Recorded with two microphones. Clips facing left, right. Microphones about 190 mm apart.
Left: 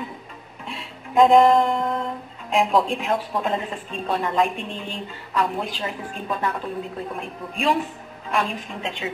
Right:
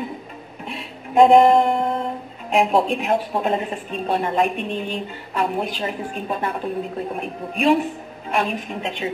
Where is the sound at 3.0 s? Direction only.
20° right (ahead or behind).